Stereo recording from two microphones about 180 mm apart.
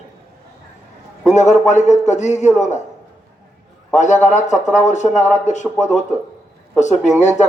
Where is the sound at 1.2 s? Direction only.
40° left (ahead or behind).